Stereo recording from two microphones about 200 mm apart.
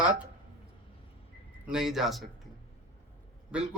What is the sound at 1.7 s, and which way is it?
Speech, centre (ahead or behind).